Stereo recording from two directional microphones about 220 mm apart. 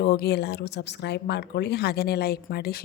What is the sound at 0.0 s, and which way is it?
Speech, 45° left (ahead or behind).